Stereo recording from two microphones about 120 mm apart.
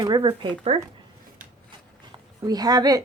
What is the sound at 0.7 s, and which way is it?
Speech, 60° right (ahead or behind).